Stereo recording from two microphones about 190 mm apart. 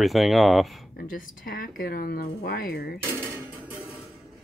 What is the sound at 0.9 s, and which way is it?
Speech, 45° left (ahead or behind).